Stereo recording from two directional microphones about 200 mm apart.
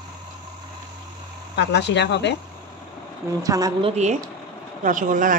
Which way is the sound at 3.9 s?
35° right (ahead or behind).